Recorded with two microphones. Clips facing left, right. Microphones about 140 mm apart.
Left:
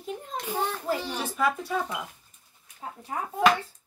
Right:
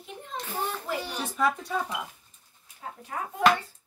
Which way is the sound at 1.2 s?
5° left (ahead or behind).